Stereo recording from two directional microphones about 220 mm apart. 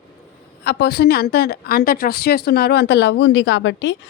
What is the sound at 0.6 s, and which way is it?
A woman's voice, 45° left (ahead or behind).